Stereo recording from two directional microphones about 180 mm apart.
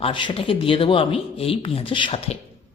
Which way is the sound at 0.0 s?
25° left (ahead or behind).